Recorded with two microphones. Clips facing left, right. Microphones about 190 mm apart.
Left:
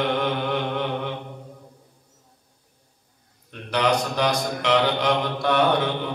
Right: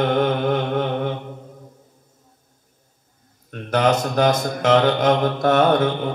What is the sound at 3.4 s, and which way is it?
Speech, 45° right (ahead or behind).